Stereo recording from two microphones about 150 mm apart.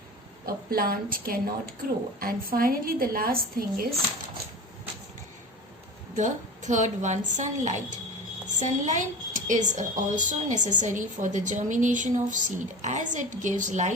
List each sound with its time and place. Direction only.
0.4 s a woman's voice: 80° right
6.1 s a woman's voice: 55° right (ahead or behind)